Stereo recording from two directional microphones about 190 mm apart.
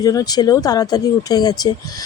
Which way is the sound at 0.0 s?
20° left (ahead or behind).